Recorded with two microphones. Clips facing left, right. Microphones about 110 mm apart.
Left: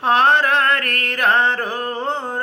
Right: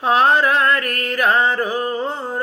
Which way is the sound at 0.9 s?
5° right (ahead or behind).